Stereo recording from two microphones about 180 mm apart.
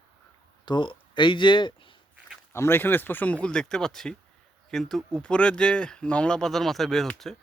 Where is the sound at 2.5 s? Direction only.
15° left (ahead or behind).